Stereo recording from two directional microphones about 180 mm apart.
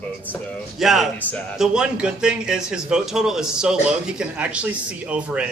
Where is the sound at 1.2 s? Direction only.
10° left (ahead or behind).